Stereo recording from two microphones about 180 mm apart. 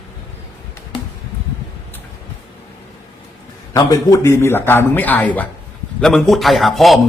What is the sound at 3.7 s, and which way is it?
A man's voice, 20° left (ahead or behind).